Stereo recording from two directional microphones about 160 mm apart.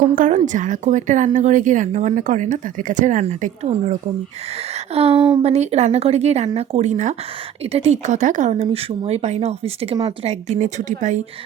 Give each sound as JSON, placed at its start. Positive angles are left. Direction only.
{"t": 0.2, "sound": "speech", "side_deg": -50}
{"t": 4.9, "sound": "a woman's voice", "side_deg": -40}